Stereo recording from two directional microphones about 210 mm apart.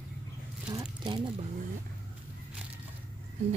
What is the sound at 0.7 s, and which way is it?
Squish, 20° right (ahead or behind).